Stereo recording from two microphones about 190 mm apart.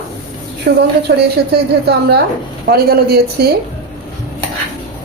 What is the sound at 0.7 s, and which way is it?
A woman's voice, 60° right (ahead or behind).